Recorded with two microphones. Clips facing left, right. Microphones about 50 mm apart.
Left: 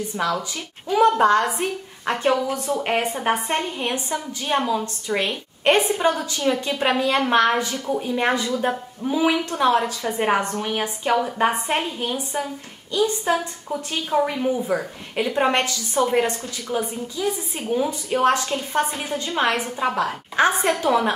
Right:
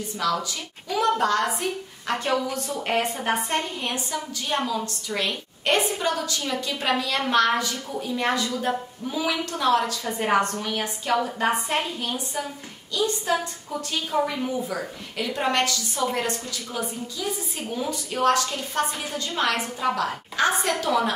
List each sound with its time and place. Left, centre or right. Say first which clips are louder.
0.2 s a woman's voice: even; left